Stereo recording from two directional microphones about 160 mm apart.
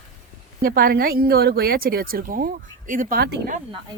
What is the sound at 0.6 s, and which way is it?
Speech, 70° right (ahead or behind).